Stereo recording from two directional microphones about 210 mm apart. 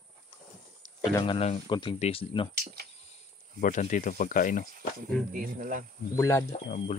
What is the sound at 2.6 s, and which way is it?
Cricket, 45° right (ahead or behind).